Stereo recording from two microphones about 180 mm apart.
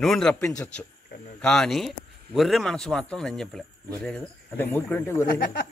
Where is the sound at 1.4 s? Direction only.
5° left (ahead or behind).